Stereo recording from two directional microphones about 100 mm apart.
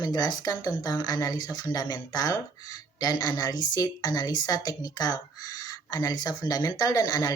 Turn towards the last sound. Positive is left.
turn(degrees=40)  # may be behind; listen again after turning